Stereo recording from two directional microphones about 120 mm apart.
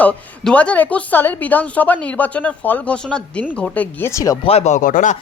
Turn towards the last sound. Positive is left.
turn(degrees=90)